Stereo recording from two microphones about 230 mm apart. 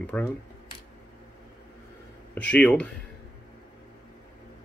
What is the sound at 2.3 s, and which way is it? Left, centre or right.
Speech, centre.